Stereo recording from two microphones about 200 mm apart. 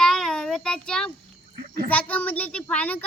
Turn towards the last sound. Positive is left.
turn(degrees=5)  # may be behind; listen again after turning